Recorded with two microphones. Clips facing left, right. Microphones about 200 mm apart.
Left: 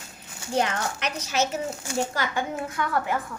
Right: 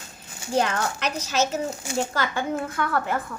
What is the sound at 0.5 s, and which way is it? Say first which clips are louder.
A woman's voice: right 2 dB; 15° left (ahead or behind).